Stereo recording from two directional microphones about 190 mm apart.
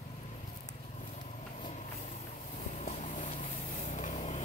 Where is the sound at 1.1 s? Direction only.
40° left (ahead or behind).